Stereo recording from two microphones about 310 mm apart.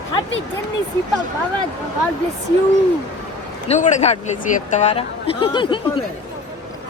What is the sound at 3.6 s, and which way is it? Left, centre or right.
A man's voice, left.